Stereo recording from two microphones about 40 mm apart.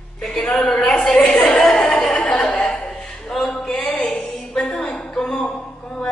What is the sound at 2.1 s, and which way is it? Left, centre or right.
Chuckle, left.